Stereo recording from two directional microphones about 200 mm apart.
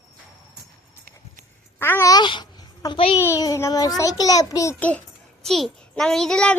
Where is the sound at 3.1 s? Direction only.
15° left (ahead or behind).